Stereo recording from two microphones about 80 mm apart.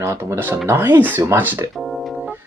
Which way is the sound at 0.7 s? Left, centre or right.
Right.